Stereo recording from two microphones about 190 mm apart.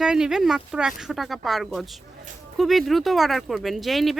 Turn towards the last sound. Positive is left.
turn(degrees=0)  # may be behind; listen again after turning